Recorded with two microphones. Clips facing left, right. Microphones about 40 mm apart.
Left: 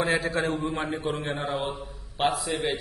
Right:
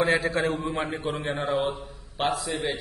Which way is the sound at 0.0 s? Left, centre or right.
Centre.